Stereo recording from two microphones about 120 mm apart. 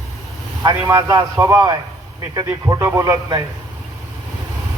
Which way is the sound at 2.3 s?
30° right (ahead or behind).